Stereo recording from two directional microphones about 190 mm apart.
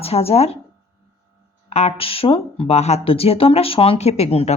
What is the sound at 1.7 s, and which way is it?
Speech, 30° left (ahead or behind).